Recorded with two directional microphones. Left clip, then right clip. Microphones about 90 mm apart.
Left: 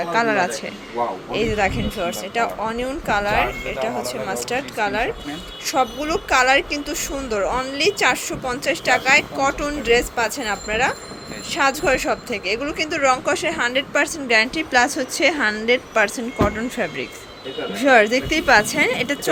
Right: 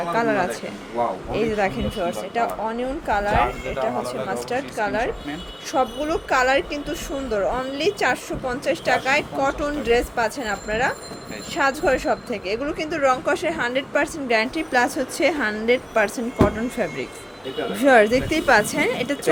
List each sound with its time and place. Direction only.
0.1 s a woman's voice: 5° left (ahead or behind)
17.7 s a woman's voice: 15° right (ahead or behind); by 19.3 s centre (ahead or behind)